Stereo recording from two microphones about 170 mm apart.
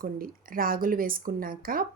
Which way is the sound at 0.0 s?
55° right (ahead or behind).